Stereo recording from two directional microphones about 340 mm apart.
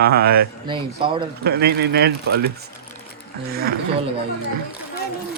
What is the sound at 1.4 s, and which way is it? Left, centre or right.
Speech, right.